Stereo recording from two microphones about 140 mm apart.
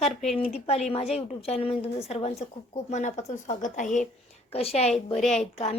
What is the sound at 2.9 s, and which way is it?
A woman's voice, 60° left (ahead or behind).